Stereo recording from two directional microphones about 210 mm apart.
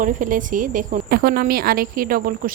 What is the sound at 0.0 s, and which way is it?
A woman's voice, 40° right (ahead or behind).